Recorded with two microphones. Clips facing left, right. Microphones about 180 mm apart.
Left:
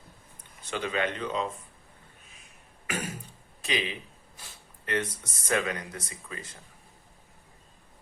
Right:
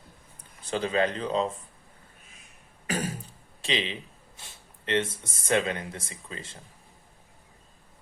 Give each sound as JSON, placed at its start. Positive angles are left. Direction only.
{"t": 0.6, "sound": "speech", "side_deg": -35}
{"t": 2.8, "sound": "beatboxing", "side_deg": -35}
{"t": 3.6, "sound": "speech", "side_deg": -25}